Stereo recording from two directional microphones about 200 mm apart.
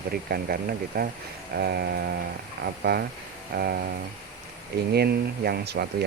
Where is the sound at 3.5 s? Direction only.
50° right (ahead or behind).